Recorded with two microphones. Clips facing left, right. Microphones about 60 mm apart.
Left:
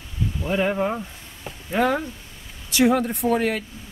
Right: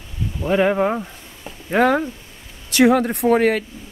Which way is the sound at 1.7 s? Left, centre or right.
Right.